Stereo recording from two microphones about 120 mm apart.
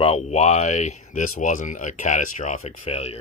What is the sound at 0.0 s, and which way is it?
Speech, 65° left (ahead or behind).